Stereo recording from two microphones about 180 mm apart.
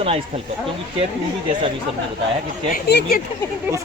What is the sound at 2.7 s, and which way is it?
Speech, 65° left (ahead or behind).